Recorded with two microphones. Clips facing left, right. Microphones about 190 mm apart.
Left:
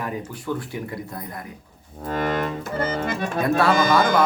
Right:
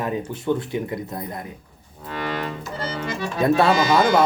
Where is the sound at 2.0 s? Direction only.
45° left (ahead or behind).